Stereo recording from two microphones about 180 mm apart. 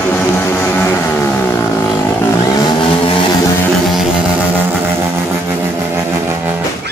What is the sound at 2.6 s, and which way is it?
Vehicle, 30° left (ahead or behind).